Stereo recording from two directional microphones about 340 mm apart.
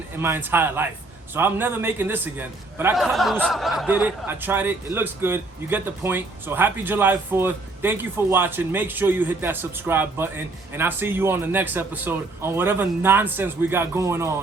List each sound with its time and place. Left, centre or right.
0.2 s a man's voice: centre